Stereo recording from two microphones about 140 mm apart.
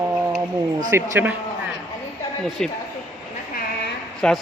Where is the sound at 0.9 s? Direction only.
15° right (ahead or behind).